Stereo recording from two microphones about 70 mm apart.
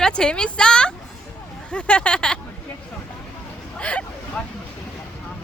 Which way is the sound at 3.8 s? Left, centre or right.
Centre.